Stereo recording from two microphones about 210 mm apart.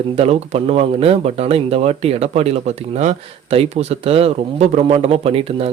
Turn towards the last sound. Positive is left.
turn(degrees=-25)  # may be behind; listen again after turning